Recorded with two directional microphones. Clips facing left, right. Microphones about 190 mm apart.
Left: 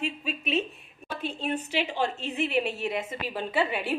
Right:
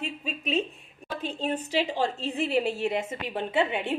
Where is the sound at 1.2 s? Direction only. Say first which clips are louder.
Right 1 dB; 35° right (ahead or behind).